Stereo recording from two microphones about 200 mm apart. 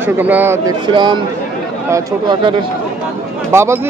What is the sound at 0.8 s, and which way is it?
Speech, 25° right (ahead or behind).